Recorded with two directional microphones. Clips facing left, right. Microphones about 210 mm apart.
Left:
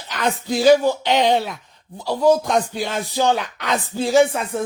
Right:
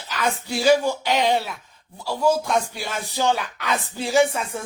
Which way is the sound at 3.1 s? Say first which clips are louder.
Left 3 dB; 15° left (ahead or behind).